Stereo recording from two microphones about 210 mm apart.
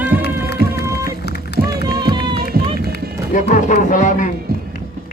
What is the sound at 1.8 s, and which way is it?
Run, 20° right (ahead or behind).